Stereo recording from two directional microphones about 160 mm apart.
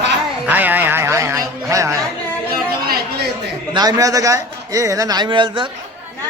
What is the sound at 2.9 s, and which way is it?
Chatter, 80° right.